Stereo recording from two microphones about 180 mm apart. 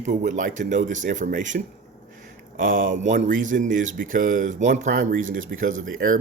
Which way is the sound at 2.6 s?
50° right (ahead or behind).